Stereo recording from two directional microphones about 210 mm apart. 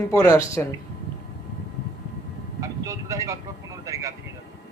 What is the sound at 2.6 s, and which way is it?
Vehicle, 15° right (ahead or behind).